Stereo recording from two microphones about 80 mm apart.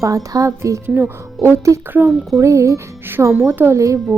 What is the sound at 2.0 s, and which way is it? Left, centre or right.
Speech, centre.